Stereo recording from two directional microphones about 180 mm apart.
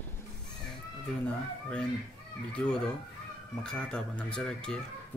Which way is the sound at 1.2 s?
5° left (ahead or behind).